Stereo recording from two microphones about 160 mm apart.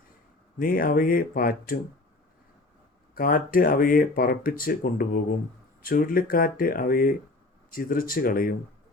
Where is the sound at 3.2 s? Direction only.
60° left (ahead or behind).